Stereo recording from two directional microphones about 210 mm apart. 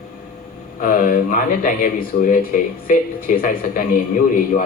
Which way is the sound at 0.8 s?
40° left (ahead or behind).